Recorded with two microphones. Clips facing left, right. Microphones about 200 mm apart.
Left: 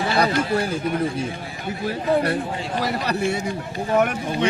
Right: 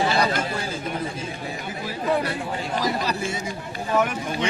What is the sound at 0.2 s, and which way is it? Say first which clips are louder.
Speech: left 4 dB; 60° left (ahead or behind).